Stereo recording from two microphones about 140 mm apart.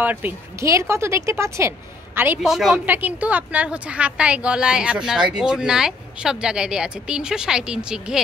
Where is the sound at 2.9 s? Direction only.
10° right (ahead or behind).